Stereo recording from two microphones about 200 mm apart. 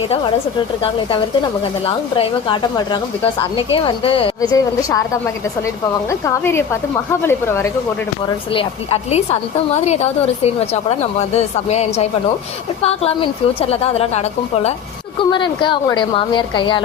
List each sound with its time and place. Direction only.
0.8 s speech: 25° left (ahead or behind)
4.4 s a woman's voice: 15° left (ahead or behind)
8.5 s a woman's voice: 30° left (ahead or behind)